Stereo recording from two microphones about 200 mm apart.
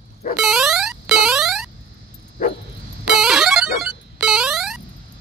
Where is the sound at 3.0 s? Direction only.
Centre (ahead or behind).